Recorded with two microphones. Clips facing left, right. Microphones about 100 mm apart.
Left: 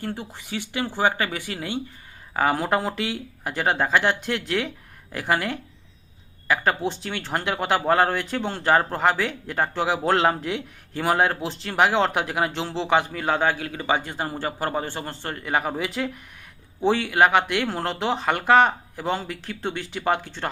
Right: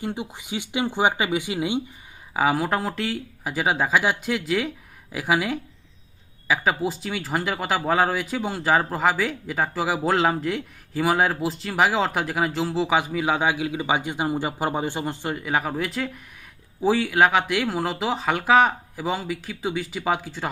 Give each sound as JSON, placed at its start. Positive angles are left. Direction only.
{"t": 0.0, "sound": "speech", "side_deg": -15}
{"t": 2.3, "sound": "speech", "side_deg": -5}